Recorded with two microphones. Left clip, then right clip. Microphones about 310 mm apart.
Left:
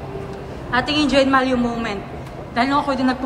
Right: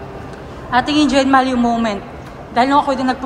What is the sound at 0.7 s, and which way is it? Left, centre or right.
A woman's voice, centre.